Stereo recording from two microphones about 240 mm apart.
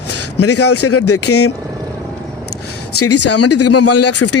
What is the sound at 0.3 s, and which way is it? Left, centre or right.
Speech, left.